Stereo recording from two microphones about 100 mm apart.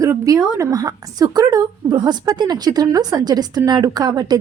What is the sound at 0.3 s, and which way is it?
Speech, 35° right (ahead or behind).